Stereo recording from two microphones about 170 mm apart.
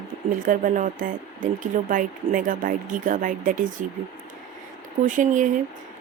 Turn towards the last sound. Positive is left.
turn(degrees=-50)  # may be behind; listen again after turning